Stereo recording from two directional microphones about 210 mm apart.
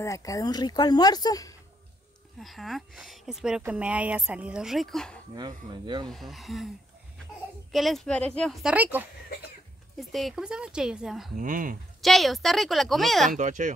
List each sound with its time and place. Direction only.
0.0 s speech: 15° left (ahead or behind)
2.4 s speech: centre (ahead or behind)
5.3 s speech: 20° right (ahead or behind)
6.0 s speech: centre (ahead or behind)
7.7 s speech: centre (ahead or behind)
11.3 s speech: 40° right (ahead or behind)
12.0 s speech: centre (ahead or behind)
13.4 s speech: 35° right (ahead or behind)